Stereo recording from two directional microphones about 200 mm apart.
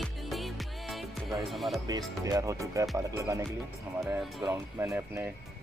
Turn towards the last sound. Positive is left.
turn(degrees=-10)  # may be behind; listen again after turning